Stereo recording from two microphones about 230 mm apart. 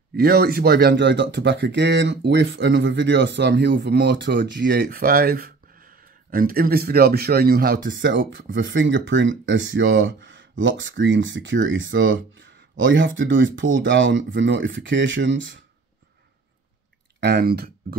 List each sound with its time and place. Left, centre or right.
0.1 s speech: right
17.2 s speech: right